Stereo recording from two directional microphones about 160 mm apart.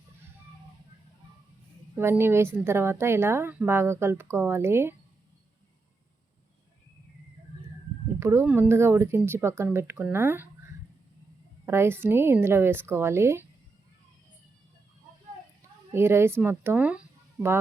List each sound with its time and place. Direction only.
2.0 s a woman's voice: 15° right (ahead or behind)
8.2 s a woman's voice: 15° right (ahead or behind)
11.6 s a woman's voice: 15° right (ahead or behind)
15.9 s a woman's voice: 15° right (ahead or behind)